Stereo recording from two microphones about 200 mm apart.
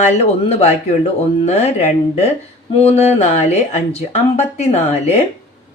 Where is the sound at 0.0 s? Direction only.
30° left (ahead or behind).